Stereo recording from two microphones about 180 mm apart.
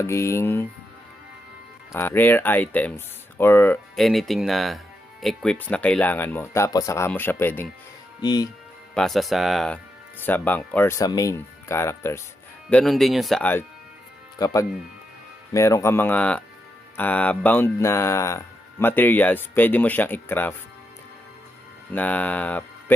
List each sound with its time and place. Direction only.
0.0 s speech: 15° left (ahead or behind)
1.9 s speech: 10° left (ahead or behind)
9.0 s speech: centre (ahead or behind)
12.7 s speech: centre (ahead or behind)
21.9 s speech: 10° left (ahead or behind)